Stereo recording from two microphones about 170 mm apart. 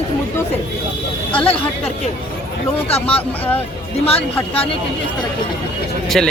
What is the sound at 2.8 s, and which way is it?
Speech, 35° left (ahead or behind).